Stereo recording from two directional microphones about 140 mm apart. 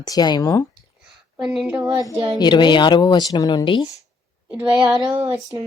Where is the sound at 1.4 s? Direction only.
10° right (ahead or behind).